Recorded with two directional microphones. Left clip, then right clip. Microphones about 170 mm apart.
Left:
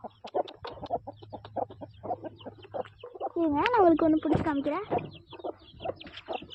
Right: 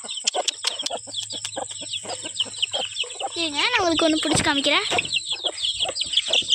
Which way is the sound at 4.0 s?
30° right (ahead or behind).